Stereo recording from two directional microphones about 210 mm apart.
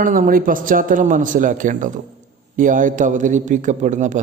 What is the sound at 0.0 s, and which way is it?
A man's voice, 40° right (ahead or behind).